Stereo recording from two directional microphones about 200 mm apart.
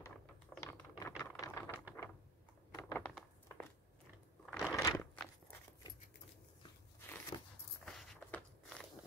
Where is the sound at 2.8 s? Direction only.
15° left (ahead or behind).